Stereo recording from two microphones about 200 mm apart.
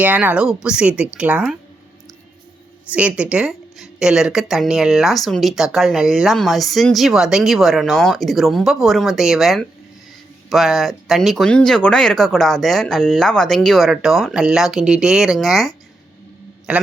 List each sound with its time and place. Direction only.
0.0 s speech: 10° right (ahead or behind)
2.9 s speech: 5° right (ahead or behind)